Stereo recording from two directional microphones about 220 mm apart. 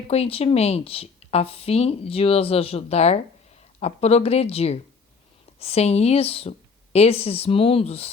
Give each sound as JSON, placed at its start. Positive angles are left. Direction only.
{"t": 0.1, "sound": "speech", "side_deg": 25}